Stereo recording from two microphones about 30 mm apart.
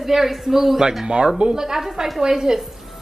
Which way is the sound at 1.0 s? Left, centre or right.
Right.